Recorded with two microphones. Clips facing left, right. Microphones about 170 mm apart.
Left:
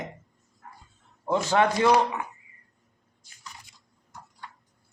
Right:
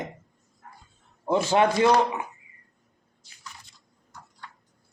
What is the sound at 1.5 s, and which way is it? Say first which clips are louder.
Speech: right 1 dB; 20° right (ahead or behind).